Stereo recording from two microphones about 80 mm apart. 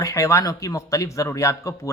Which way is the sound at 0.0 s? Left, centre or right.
Left.